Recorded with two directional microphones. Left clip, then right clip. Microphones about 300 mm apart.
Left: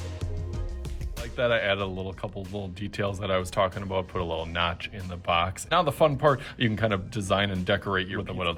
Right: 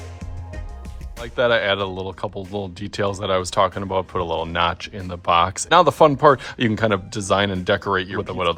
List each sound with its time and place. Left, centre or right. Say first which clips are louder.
1.2 s speech: right 7 dB; centre